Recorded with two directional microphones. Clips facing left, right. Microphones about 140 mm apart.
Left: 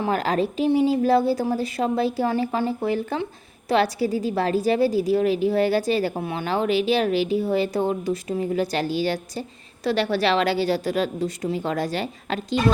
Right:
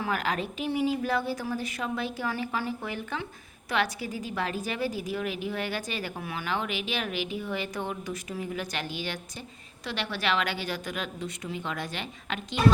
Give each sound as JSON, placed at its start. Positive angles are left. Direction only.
{"t": 0.0, "sound": "a woman's voice", "side_deg": 30}